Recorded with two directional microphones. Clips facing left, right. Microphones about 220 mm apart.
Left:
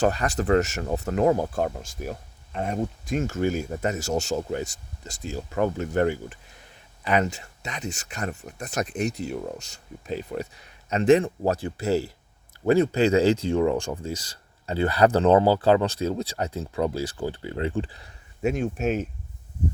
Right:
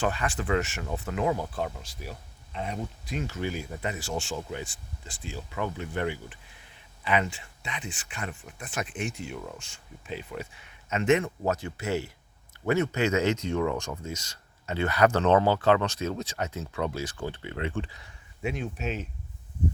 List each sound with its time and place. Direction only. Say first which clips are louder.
0.0 s speech: left 6 dB; 40° left (ahead or behind)